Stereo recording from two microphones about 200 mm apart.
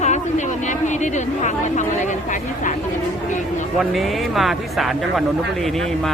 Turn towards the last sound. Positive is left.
turn(degrees=0)  # may be behind; listen again after turning